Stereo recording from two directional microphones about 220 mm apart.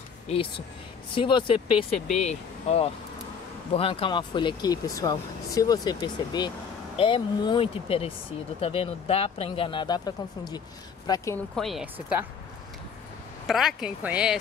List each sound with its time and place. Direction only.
0.3 s speech: 25° left (ahead or behind)
11.5 s speech: centre (ahead or behind)
13.5 s speech: centre (ahead or behind)